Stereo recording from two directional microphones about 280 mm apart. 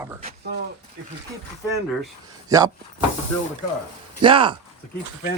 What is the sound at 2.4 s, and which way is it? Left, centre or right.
Speech, centre.